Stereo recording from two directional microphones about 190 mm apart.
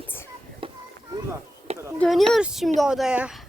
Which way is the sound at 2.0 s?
Centre (ahead or behind).